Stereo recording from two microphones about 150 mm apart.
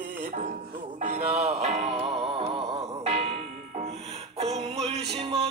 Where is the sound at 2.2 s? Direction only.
40° right (ahead or behind).